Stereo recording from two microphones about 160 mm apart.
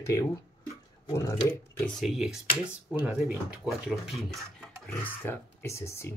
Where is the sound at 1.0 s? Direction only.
20° left (ahead or behind).